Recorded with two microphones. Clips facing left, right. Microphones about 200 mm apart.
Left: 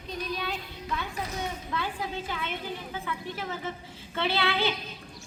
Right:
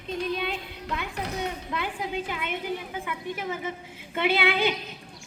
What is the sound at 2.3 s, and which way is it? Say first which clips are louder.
Speech: right 3 dB; 15° right (ahead or behind).